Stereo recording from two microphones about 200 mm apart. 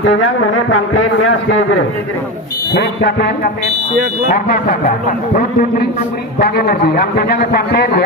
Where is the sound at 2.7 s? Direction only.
55° left (ahead or behind).